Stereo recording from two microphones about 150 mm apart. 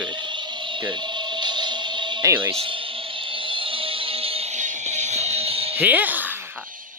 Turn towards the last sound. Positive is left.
turn(degrees=-10)  # may be behind; listen again after turning